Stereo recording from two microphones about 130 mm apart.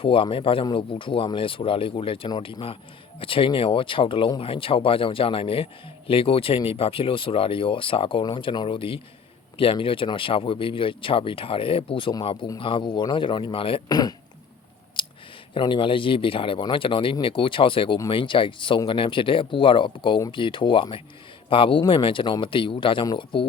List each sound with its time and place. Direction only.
0.0 s speech: 45° left (ahead or behind)
13.8 s speech: 30° left (ahead or behind)
15.0 s a sound: 40° left (ahead or behind)
15.5 s speech: 40° left (ahead or behind)